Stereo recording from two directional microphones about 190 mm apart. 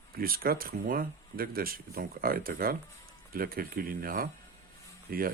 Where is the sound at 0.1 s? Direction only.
50° right (ahead or behind).